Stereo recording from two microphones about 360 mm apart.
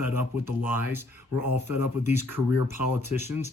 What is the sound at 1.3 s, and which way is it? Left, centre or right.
Speech, left.